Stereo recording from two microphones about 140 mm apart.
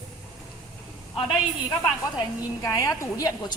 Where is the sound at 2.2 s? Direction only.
25° left (ahead or behind).